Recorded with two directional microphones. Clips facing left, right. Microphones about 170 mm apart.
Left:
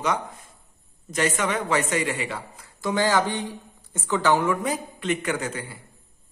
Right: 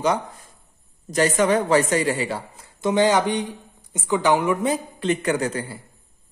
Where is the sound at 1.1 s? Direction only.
35° right (ahead or behind); by 4.6 s 15° right (ahead or behind).